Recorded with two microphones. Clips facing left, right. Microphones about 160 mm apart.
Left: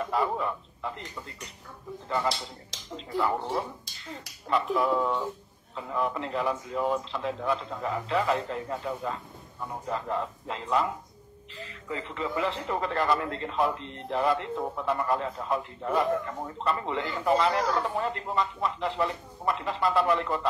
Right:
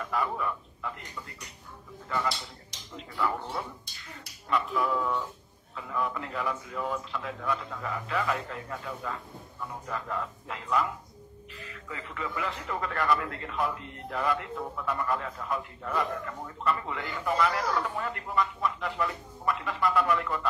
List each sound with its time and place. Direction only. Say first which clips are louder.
0.0 s speech: left 3 dB; 30° left (ahead or behind)
4.5 s speech: left 3 dB; 30° left (ahead or behind)